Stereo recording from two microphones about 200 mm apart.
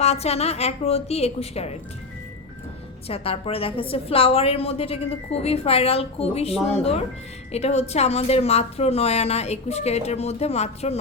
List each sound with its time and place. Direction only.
0.0 s a woman's voice: 30° left (ahead or behind)
3.1 s a woman's voice: 30° left (ahead or behind)